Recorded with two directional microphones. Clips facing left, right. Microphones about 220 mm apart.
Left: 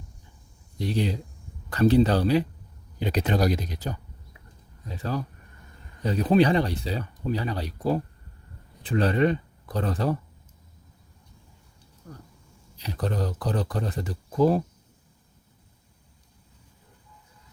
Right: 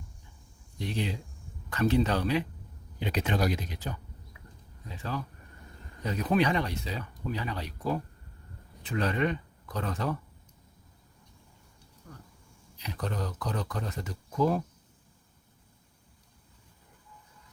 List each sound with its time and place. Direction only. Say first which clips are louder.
0.8 s speech: left 6 dB; 35° left (ahead or behind)
12.1 s speech: left 5 dB; 40° left (ahead or behind)